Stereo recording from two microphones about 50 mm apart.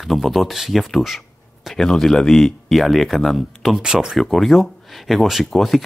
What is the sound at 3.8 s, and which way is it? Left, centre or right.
Speech, centre.